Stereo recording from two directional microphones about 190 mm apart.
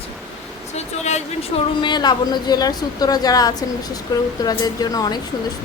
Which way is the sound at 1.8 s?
20° left (ahead or behind).